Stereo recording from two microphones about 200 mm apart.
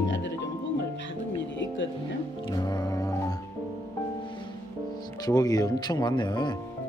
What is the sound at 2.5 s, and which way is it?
Music, 20° left (ahead or behind).